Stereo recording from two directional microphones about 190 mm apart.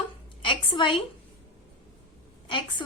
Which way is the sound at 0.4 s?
25° left (ahead or behind).